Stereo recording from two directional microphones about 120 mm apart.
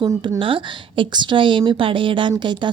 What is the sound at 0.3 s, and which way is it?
A woman's voice, 45° right (ahead or behind).